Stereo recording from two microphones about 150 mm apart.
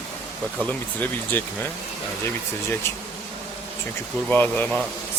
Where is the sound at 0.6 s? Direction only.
10° left (ahead or behind).